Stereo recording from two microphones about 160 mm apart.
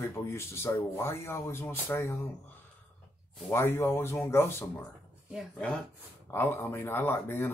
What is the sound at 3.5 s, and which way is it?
Speech, 15° left (ahead or behind).